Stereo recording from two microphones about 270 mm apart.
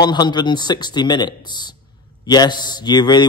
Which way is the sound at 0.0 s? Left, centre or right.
Centre.